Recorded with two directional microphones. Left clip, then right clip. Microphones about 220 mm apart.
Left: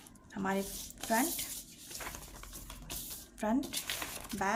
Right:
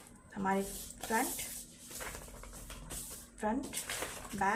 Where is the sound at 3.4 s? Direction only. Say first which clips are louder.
Left 2 dB; 55° left (ahead or behind).